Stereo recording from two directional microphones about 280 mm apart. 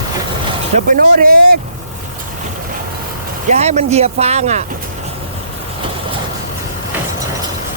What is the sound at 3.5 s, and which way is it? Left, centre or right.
Speech, right.